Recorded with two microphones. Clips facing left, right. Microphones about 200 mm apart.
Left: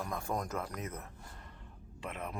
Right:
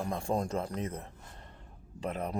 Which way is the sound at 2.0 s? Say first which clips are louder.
Right 7 dB; 35° right (ahead or behind).